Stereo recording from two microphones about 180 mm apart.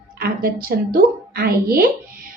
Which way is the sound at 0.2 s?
55° right (ahead or behind).